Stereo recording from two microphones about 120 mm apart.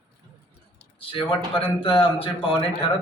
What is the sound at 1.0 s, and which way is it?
Speech, 45° left (ahead or behind).